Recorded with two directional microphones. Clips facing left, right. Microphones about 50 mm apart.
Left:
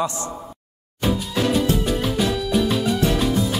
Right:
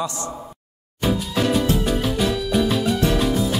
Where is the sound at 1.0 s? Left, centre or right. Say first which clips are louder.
Even; centre.